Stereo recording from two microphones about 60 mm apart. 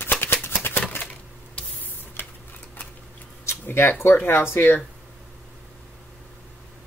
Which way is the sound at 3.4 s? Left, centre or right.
Left.